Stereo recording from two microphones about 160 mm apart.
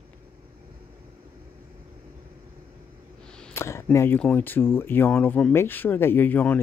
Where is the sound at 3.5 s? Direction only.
15° left (ahead or behind).